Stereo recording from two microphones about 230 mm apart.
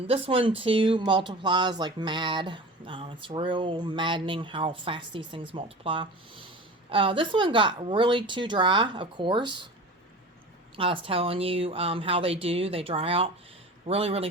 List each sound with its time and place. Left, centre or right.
0.1 s speech: right
10.8 s speech: right